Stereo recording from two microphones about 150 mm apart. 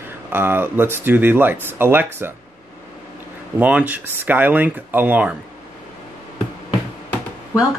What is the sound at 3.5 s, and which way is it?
Speech, 10° right (ahead or behind).